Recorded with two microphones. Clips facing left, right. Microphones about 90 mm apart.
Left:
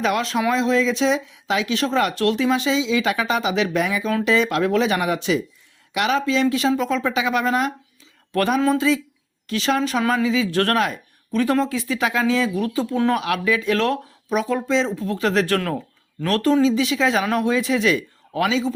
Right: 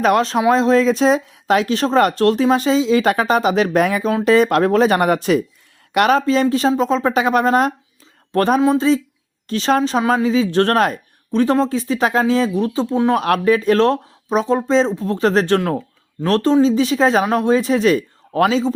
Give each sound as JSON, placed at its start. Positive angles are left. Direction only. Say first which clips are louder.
{"t": 0.0, "sound": "speech", "louder": "right 6 dB", "side_deg": -40}
{"t": 7.1, "sound": "speech", "louder": "right 7 dB", "side_deg": -45}
{"t": 10.2, "sound": "speech", "louder": "right 4 dB", "side_deg": -40}
{"t": 10.8, "sound": "speech", "louder": "right 5 dB", "side_deg": -45}
{"t": 11.3, "sound": "speech", "louder": "right 4 dB", "side_deg": -30}
{"t": 13.1, "sound": "speech", "louder": "right 6 dB", "side_deg": -45}